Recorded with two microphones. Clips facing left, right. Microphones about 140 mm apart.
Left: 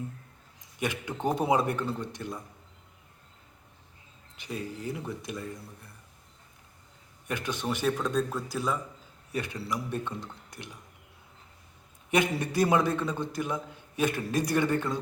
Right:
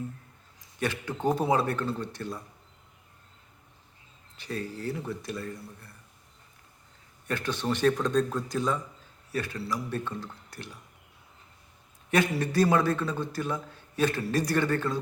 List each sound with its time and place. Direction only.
0.8 s a man's voice: 15° left (ahead or behind)
4.4 s a man's voice: 15° left (ahead or behind)
7.3 s a man's voice: 15° left (ahead or behind)
9.3 s a man's voice: 20° left (ahead or behind)
12.1 s a man's voice: 15° left (ahead or behind)